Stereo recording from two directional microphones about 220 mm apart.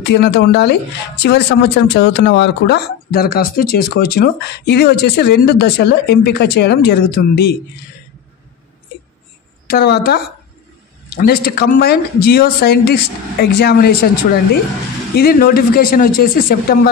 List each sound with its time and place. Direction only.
0.0 s speech: 50° left (ahead or behind)
9.7 s speech: 45° left (ahead or behind)